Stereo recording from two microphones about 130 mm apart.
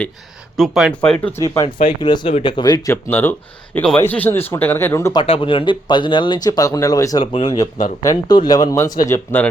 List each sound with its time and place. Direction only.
0.5 s speech: centre (ahead or behind)
1.4 s speech: 25° left (ahead or behind)
1.9 s speech: 35° left (ahead or behind)
2.9 s speech: 15° left (ahead or behind)
5.2 s speech: 45° left (ahead or behind); by 9.5 s 15° left (ahead or behind)